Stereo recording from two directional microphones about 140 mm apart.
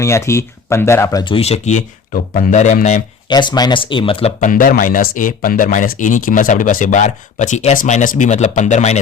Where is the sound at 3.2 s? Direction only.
30° left (ahead or behind).